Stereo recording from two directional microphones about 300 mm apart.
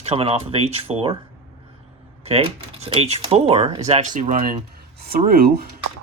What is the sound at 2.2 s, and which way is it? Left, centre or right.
Speech, centre.